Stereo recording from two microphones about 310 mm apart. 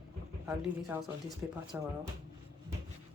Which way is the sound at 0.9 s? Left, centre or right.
Centre.